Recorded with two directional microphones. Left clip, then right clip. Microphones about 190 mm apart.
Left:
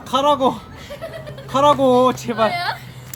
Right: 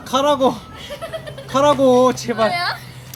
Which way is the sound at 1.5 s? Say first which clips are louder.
Even; centre (ahead or behind).